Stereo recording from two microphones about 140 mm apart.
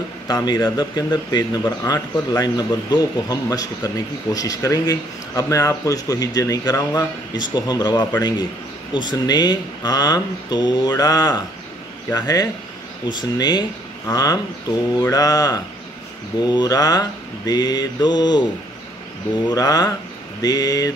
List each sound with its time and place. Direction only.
0.3 s speech: 30° left (ahead or behind)
19.4 s speech: 25° left (ahead or behind)